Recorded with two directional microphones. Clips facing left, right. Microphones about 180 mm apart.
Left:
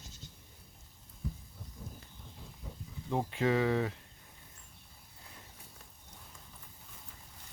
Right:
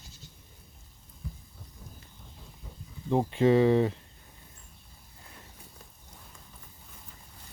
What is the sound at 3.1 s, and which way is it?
Speech, 25° right (ahead or behind).